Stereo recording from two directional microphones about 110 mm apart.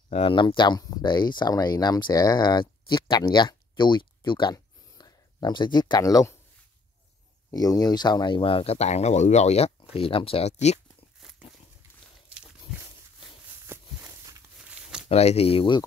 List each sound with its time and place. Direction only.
0.1 s speech: 55° left (ahead or behind); by 6.3 s 30° left (ahead or behind)
7.5 s speech: 35° left (ahead or behind); by 9.7 s 85° left
9.8 s speech: 55° left (ahead or behind); by 10.8 s 80° left
13.7 s a sound: 20° right (ahead or behind)
14.7 s a sound: 5° right (ahead or behind)
15.0 s speech: 70° left (ahead or behind); by 15.8 s 55° left (ahead or behind)